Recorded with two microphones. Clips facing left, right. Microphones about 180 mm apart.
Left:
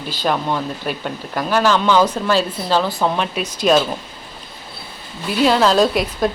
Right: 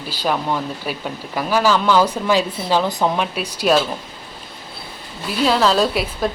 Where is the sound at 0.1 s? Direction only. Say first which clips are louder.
Left 1 dB; 10° right (ahead or behind).